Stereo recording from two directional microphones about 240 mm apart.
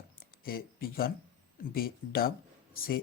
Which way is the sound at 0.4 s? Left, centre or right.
Left.